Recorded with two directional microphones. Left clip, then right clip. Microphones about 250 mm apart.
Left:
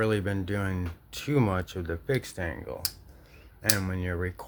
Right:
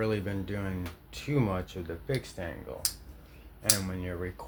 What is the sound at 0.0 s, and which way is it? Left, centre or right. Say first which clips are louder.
Speech: left 4 dB; left.